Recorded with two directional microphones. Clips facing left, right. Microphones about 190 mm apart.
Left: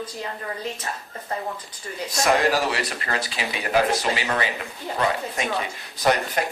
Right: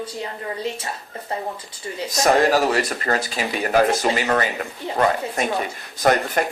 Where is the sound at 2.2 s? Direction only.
45° right (ahead or behind).